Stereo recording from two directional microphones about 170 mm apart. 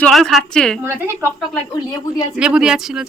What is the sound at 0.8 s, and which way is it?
Speech, 15° right (ahead or behind).